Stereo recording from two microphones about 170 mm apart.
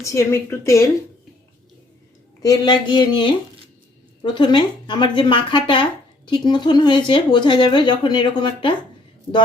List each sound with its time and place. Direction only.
0.0 s a woman's voice: 15° left (ahead or behind)
2.4 s speech: 25° left (ahead or behind)